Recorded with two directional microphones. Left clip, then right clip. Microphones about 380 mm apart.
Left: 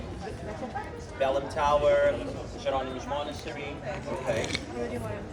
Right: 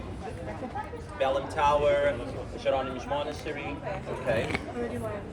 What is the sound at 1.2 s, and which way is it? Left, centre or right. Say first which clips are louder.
Speech: right 1 dB; centre.